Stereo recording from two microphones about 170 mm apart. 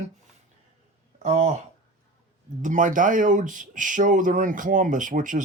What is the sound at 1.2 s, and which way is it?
Speech, 45° right (ahead or behind).